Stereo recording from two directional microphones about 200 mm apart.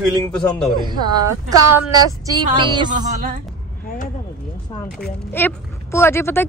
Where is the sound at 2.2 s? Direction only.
20° right (ahead or behind).